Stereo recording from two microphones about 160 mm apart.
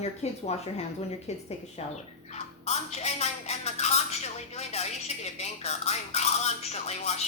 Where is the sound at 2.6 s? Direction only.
45° left (ahead or behind).